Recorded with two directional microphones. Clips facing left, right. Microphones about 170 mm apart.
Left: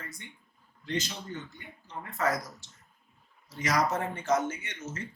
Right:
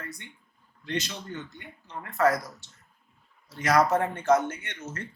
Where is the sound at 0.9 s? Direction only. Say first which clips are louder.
Right 1 dB; 70° right (ahead or behind).